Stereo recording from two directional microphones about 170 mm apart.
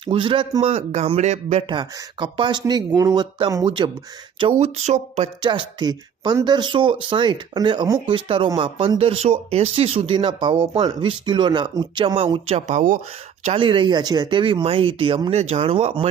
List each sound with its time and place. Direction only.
0.0 s speech: 30° right (ahead or behind)
1.6 s speech: 25° right (ahead or behind)
4.6 s speech: 40° right (ahead or behind)
5.4 s speech: 25° right (ahead or behind); by 13.0 s 45° right (ahead or behind)
13.4 s speech: 35° right (ahead or behind)